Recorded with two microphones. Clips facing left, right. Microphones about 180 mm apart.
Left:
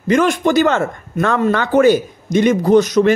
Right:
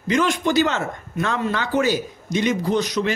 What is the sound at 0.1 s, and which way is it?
Speech, 50° left (ahead or behind).